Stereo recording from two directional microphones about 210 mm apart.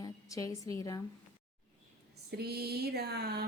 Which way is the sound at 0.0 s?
15° left (ahead or behind).